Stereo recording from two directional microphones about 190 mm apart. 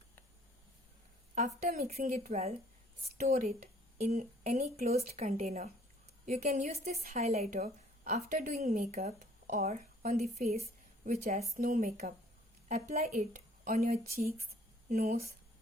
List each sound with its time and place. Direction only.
1.6 s a woman's voice: 50° right (ahead or behind)
4.9 s a woman's voice: 35° right (ahead or behind)